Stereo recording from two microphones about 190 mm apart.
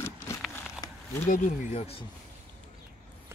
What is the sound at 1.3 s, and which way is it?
Speech, 40° left (ahead or behind).